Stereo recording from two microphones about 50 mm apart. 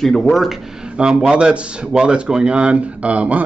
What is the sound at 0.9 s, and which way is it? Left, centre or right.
Speech, centre.